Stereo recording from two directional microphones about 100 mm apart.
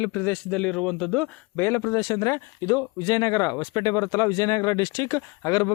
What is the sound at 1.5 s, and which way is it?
Speech, 25° left (ahead or behind).